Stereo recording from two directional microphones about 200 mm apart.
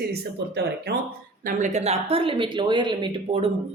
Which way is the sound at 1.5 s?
35° right (ahead or behind).